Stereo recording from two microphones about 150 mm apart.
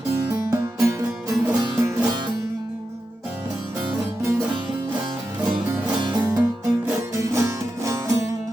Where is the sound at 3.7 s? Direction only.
20° right (ahead or behind).